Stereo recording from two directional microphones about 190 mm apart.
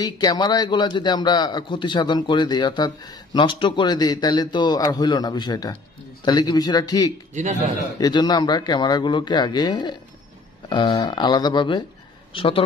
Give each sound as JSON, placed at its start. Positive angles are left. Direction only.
{"t": 0.0, "sound": "a man's voice", "side_deg": 20}